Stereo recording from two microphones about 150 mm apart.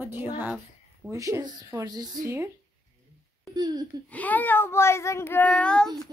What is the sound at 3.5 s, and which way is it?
Speech, 30° right (ahead or behind).